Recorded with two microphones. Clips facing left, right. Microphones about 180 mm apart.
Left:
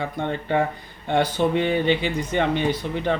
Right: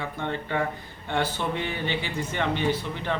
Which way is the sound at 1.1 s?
15° left (ahead or behind).